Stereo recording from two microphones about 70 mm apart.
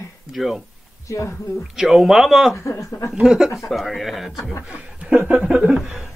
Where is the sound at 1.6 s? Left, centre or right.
Centre.